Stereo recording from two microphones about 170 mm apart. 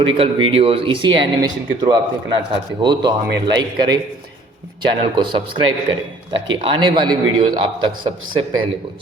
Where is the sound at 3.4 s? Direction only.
25° right (ahead or behind).